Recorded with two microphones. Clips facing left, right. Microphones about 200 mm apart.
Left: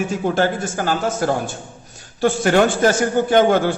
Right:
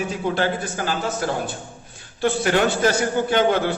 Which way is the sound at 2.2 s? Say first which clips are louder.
Left 4 dB; 50° left (ahead or behind).